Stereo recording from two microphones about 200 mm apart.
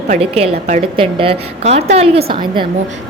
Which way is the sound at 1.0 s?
25° right (ahead or behind).